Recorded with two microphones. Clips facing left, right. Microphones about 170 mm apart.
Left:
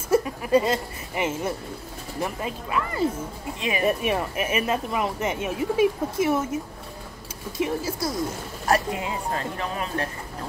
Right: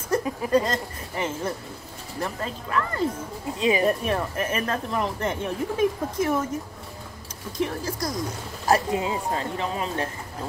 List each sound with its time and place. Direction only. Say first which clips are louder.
0.1 s a sound: left 4 dB; 5° left (ahead or behind)
0.5 s a woman's voice: left 3 dB; 10° left (ahead or behind)
7.5 s a woman's voice: left 1 dB; 5° left (ahead or behind)
8.6 s speech: right 2 dB; 25° right (ahead or behind)